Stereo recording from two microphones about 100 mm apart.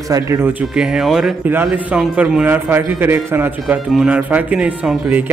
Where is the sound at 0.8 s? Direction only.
5° right (ahead or behind).